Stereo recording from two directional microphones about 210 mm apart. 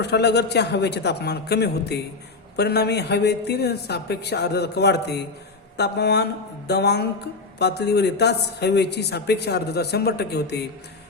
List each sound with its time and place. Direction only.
0.0 s a man's voice: 55° left (ahead or behind)